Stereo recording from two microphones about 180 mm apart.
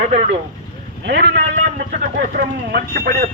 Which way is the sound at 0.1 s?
40° right (ahead or behind).